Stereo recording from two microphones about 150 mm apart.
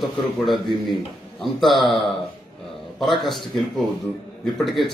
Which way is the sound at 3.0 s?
Centre (ahead or behind).